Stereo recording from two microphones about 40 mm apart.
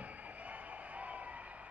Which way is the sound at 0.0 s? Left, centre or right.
Right.